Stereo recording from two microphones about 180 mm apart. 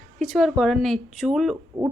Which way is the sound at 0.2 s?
Centre (ahead or behind).